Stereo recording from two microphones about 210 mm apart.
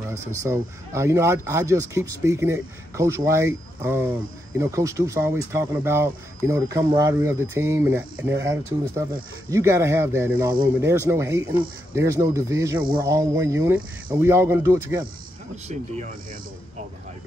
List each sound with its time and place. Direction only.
0.4 s speech: 15° right (ahead or behind)
15.5 s speech: 35° right (ahead or behind)